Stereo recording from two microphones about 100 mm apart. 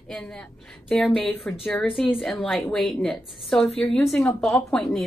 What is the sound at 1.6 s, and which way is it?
Speech, 20° left (ahead or behind).